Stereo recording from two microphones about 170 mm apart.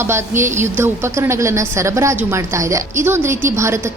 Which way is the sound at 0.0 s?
15° right (ahead or behind).